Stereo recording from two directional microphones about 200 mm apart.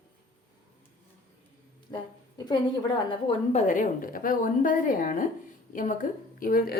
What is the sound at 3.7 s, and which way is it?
A woman's voice, 45° left (ahead or behind).